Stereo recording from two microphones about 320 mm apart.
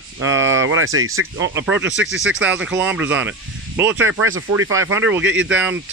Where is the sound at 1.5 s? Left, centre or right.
Centre.